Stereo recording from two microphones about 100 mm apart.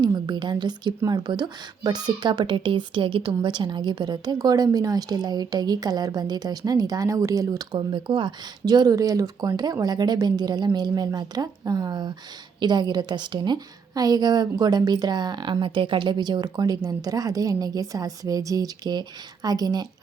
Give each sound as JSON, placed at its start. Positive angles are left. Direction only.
{"t": 0.0, "sound": "a woman's voice", "side_deg": -45}
{"t": 3.4, "sound": "speech", "side_deg": -50}
{"t": 7.8, "sound": "a woman's voice", "side_deg": -55}